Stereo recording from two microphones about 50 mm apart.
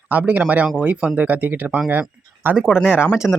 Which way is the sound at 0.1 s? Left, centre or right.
Right.